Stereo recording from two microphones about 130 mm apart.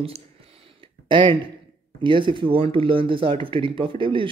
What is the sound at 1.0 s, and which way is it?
Speech, 40° right (ahead or behind).